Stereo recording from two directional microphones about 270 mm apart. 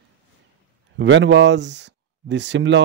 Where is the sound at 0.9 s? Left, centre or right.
Right.